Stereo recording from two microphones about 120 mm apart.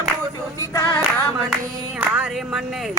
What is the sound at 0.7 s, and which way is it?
Singing, 20° left (ahead or behind).